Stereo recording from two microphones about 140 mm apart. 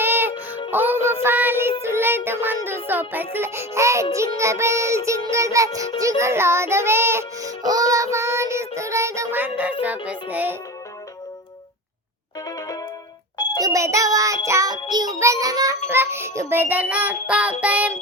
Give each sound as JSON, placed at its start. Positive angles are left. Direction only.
{"t": 0.0, "sound": "music", "side_deg": -15}
{"t": 0.7, "sound": "child singing", "side_deg": -15}
{"t": 4.1, "sound": "music", "side_deg": -20}
{"t": 9.8, "sound": "child singing", "side_deg": -10}
{"t": 12.5, "sound": "music", "side_deg": 25}
{"t": 13.6, "sound": "music", "side_deg": -25}
{"t": 15.9, "sound": "child singing", "side_deg": -15}